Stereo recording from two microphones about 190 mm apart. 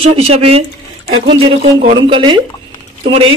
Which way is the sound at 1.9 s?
25° right (ahead or behind).